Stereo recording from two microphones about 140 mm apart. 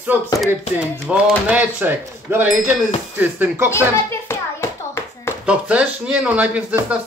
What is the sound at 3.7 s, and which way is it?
Hands, 20° left (ahead or behind).